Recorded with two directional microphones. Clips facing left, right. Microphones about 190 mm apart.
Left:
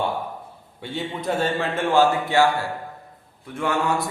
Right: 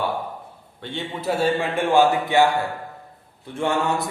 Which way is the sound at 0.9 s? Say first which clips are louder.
Right 1 dB; 5° right (ahead or behind).